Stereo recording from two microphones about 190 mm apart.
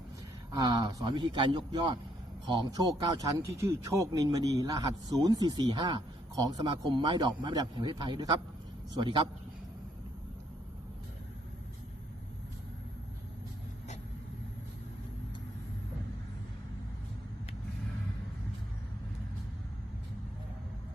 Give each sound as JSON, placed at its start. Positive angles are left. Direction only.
{"t": 0.5, "sound": "speech", "side_deg": -20}